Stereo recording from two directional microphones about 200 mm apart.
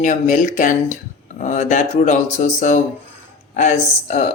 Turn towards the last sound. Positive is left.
turn(degrees=35)  # may be behind; listen again after turning